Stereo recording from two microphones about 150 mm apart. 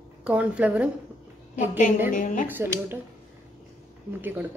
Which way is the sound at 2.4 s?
15° right (ahead or behind).